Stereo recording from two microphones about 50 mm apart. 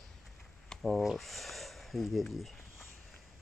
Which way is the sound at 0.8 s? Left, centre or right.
Centre.